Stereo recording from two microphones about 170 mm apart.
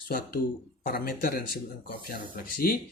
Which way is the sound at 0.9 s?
60° left (ahead or behind).